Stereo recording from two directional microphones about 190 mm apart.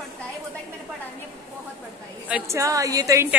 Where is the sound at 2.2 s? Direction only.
10° right (ahead or behind).